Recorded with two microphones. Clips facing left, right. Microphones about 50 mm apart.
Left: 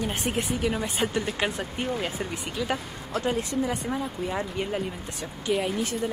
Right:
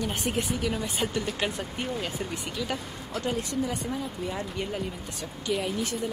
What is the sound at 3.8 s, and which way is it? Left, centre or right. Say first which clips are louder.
Speech: left 3 dB; left.